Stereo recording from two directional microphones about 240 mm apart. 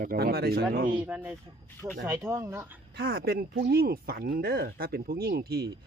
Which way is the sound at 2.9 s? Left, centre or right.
Right.